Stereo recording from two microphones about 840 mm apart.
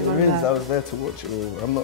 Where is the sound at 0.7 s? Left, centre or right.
Left.